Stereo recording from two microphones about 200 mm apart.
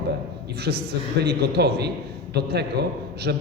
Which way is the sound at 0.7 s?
55° right (ahead or behind).